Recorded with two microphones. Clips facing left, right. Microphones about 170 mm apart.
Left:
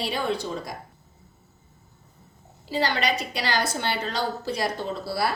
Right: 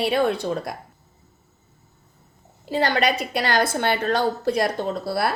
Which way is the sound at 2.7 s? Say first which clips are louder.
Right 4 dB; 55° right (ahead or behind).